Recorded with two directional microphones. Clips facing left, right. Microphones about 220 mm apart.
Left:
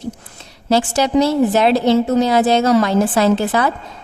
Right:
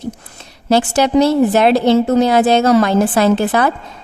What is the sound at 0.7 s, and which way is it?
A woman's voice, 60° right (ahead or behind).